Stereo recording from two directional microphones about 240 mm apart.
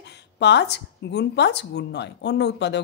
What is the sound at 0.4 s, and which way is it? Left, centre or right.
Speech, left.